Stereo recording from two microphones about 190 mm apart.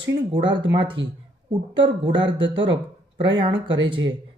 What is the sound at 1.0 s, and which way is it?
Speech, 75° right (ahead or behind).